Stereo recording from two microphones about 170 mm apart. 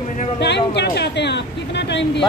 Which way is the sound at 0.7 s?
85° left.